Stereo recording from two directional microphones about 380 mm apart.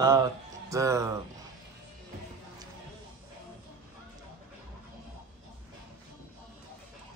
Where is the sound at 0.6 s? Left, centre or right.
Centre.